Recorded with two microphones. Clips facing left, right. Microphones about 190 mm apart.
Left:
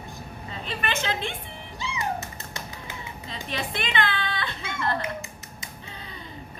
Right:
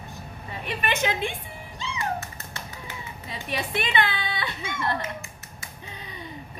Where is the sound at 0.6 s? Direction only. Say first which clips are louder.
Right 3 dB; 15° right (ahead or behind).